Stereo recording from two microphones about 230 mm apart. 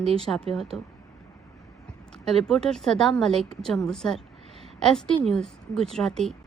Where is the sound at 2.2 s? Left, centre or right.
Centre.